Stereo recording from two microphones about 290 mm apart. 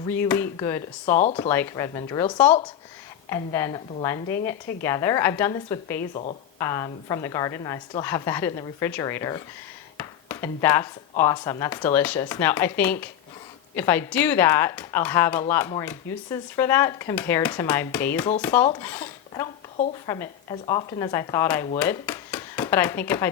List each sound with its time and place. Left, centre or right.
0.2 s speech: centre
1.2 s speech: left
1.5 s speech: centre
10.0 s a sound: centre
11.2 s speech: centre